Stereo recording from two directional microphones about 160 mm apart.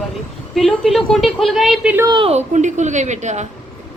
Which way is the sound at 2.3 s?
50° right (ahead or behind).